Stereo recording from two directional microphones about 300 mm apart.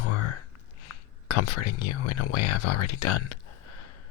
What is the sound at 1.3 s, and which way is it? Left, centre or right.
Speech, left.